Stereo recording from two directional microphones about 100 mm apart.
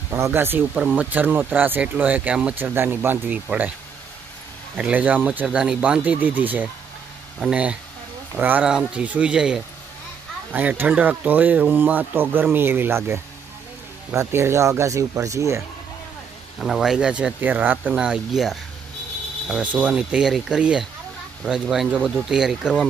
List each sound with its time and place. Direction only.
0.1 s speech: 25° right (ahead or behind)
0.7 s speech: 10° right (ahead or behind)
4.7 s speech: 15° right (ahead or behind)
8.4 s speech: 20° right (ahead or behind)
16.5 s speech: centre (ahead or behind)